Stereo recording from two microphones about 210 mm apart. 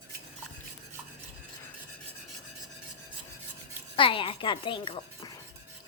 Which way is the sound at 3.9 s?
25° left (ahead or behind).